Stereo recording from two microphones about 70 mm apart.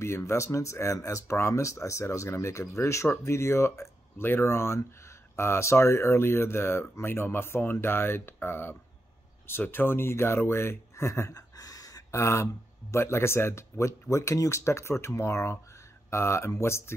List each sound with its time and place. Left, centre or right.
0.0 s speech: left
12.2 s speech: left